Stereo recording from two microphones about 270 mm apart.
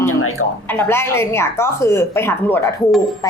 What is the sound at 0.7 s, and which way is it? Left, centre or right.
Speech, centre.